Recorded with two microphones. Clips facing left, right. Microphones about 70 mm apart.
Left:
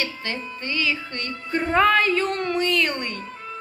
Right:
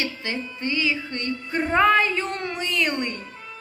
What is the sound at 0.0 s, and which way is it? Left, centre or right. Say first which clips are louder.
A woman's voice: even; centre.